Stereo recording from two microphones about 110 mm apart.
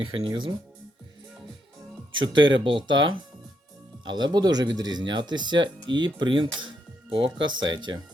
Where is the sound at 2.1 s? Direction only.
45° right (ahead or behind).